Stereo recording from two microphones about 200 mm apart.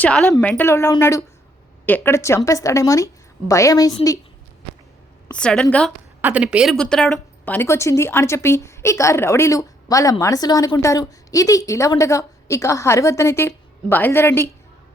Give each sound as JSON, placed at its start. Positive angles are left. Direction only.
{"t": 0.0, "sound": "a woman's voice", "side_deg": 5}
{"t": 5.3, "sound": "a woman's voice", "side_deg": 5}
{"t": 6.2, "sound": "speech", "side_deg": -5}